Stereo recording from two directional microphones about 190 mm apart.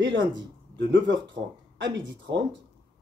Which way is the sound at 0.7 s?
70° right (ahead or behind).